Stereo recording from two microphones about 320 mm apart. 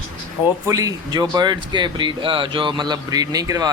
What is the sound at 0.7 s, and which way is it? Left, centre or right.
Speech, centre.